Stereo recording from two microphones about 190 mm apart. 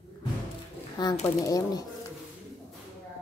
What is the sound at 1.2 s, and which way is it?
Speech, 20° left (ahead or behind).